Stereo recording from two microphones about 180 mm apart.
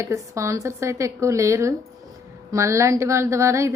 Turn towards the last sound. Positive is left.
turn(degrees=-15)  # may be behind; listen again after turning